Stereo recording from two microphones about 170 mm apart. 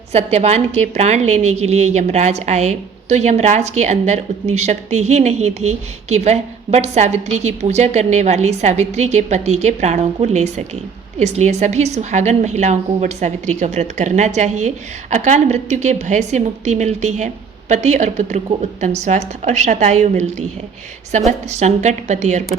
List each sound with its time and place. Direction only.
0.1 s a woman's voice: 40° right (ahead or behind)